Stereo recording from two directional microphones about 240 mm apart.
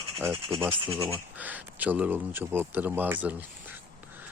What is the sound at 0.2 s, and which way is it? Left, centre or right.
Speech, centre.